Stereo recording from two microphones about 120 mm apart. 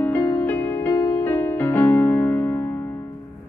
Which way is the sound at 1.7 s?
15° left (ahead or behind).